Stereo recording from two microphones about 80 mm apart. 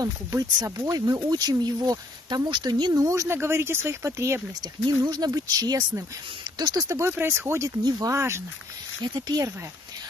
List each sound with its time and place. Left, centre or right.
0.0 s speech: right
2.9 s speech: right
4.8 s speech: right
9.0 s speech: right